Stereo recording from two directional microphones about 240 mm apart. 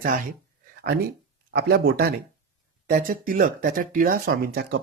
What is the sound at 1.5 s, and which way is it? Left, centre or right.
Speech, right.